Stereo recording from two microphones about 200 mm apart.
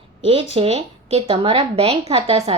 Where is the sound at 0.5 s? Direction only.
30° right (ahead or behind).